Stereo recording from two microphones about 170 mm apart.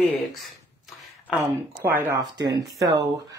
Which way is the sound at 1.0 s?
10° right (ahead or behind).